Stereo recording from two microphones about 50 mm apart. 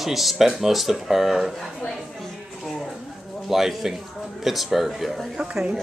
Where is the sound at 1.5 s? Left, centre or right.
Centre.